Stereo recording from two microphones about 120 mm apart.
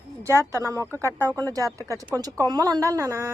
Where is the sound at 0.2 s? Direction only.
25° right (ahead or behind).